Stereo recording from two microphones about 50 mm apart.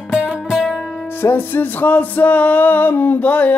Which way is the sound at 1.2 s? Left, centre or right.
Left.